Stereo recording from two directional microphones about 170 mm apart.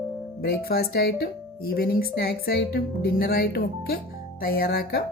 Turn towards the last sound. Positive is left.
turn(degrees=60)  # may be behind; listen again after turning